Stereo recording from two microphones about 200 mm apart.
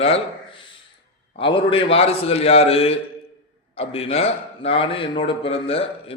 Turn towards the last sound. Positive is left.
turn(degrees=30)  # may be behind; listen again after turning